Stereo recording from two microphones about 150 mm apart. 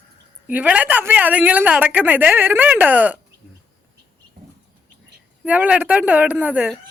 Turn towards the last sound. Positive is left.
turn(degrees=-10)  # may be behind; listen again after turning